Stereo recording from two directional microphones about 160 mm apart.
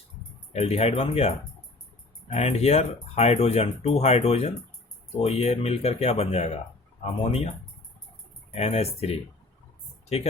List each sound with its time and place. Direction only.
0.5 s speech: 40° left (ahead or behind)
2.3 s speech: 40° left (ahead or behind)
8.5 s speech: 40° left (ahead or behind)